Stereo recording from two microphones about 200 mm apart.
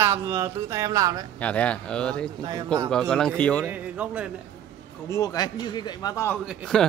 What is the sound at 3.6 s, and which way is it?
Speech, 5° right (ahead or behind).